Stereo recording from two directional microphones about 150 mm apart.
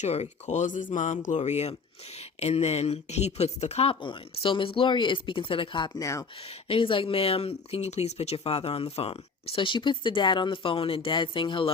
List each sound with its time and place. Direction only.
0.0 s speech: 50° left (ahead or behind); by 6.2 s 25° left (ahead or behind)
6.4 s speech: 40° left (ahead or behind)